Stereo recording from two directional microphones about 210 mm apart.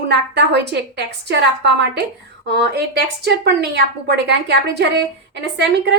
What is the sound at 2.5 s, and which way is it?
A woman's voice, 55° right (ahead or behind).